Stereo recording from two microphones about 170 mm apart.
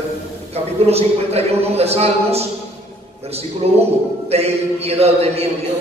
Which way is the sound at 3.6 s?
35° right (ahead or behind).